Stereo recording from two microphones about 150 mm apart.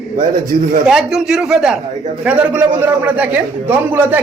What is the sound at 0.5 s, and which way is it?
Speech, 60° right (ahead or behind).